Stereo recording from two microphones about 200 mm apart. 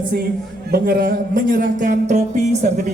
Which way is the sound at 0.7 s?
50° right (ahead or behind).